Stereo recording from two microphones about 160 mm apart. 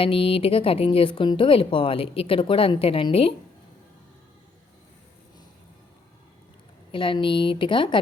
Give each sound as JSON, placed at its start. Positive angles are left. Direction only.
{"t": 0.0, "sound": "speech", "side_deg": 35}
{"t": 6.9, "sound": "speech", "side_deg": 30}